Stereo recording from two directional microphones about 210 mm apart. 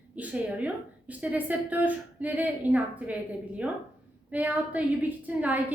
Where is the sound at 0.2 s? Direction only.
5° right (ahead or behind).